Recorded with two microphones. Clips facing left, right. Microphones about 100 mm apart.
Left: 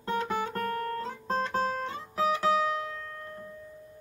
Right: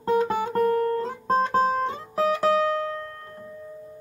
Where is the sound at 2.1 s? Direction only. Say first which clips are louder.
Right 4 dB; 50° right (ahead or behind).